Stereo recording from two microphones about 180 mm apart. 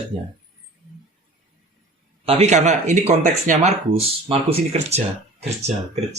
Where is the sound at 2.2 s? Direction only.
35° right (ahead or behind).